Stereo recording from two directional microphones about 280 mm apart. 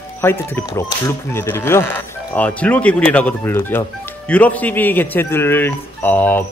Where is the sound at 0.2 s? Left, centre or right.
Centre.